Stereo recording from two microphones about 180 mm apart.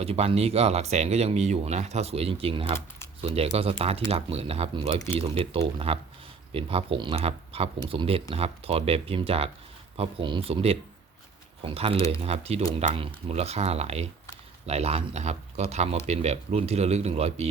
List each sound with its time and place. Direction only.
0.0 s speech: 35° right (ahead or behind)